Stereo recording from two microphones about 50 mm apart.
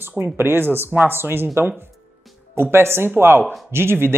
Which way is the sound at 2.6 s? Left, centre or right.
Right.